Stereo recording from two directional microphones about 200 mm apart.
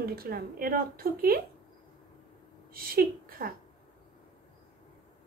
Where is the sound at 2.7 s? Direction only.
45° right (ahead or behind).